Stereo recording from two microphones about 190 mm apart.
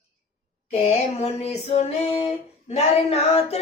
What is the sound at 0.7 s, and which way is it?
Female singing, 35° left (ahead or behind).